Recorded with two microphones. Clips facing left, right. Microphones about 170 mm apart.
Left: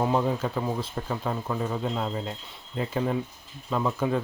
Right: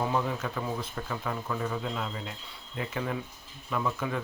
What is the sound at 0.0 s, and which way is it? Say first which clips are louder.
Speech: left 5 dB; 30° left (ahead or behind).